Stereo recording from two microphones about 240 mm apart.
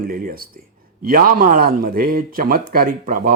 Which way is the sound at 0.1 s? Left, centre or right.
Right.